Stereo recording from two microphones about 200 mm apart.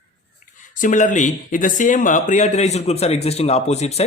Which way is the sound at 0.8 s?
40° left (ahead or behind).